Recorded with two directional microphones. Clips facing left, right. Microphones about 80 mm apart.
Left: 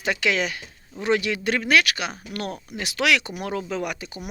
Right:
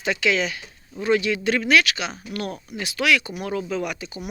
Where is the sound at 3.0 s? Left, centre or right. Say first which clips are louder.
Right 1 dB; left.